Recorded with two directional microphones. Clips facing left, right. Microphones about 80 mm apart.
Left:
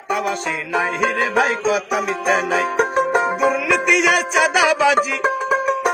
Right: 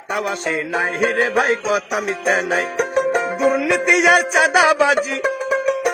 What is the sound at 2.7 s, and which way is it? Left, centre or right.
Music, left.